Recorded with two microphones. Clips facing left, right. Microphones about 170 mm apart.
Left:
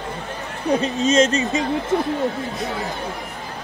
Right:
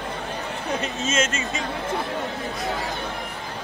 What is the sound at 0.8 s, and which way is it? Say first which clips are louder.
Speech: left 9 dB; 35° left (ahead or behind).